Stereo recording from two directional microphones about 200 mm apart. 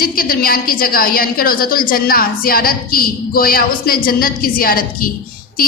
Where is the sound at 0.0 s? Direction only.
45° left (ahead or behind).